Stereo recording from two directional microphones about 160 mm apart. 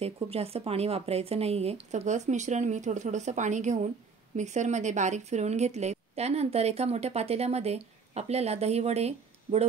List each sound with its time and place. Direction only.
0.0 s a woman's voice: 40° right (ahead or behind)